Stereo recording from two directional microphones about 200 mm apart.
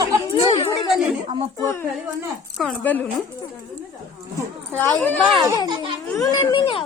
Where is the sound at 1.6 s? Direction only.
10° left (ahead or behind).